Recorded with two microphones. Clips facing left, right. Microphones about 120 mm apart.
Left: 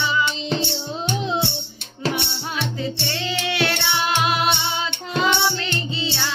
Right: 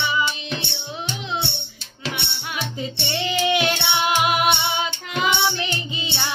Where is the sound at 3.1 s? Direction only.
15° right (ahead or behind).